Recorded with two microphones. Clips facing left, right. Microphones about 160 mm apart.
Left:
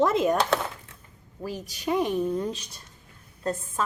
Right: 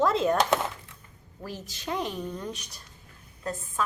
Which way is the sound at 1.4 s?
15° left (ahead or behind).